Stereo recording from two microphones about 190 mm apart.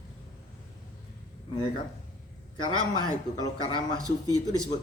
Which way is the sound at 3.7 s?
25° left (ahead or behind).